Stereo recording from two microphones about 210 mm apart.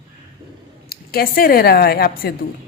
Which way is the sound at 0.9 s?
45° left (ahead or behind).